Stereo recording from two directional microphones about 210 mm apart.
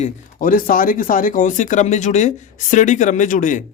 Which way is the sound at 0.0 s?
40° left (ahead or behind).